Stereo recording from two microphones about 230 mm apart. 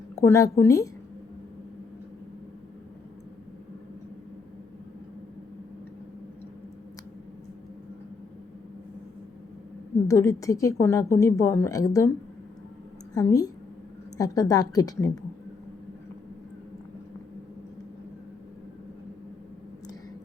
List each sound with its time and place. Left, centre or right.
0.2 s a woman's voice: centre
10.1 s a woman's voice: centre
13.1 s a woman's voice: centre